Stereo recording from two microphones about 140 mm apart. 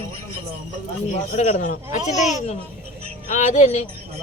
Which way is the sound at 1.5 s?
70° left (ahead or behind).